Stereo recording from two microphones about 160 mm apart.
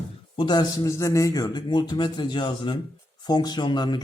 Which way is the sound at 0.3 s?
25° left (ahead or behind).